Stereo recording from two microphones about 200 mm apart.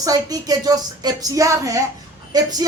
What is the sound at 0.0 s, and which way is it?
Speech, 20° right (ahead or behind).